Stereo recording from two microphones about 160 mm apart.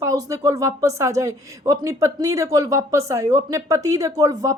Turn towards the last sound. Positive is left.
turn(degrees=-20)  # may be behind; listen again after turning